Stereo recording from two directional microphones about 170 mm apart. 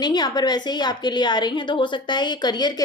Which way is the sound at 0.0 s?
25° left (ahead or behind).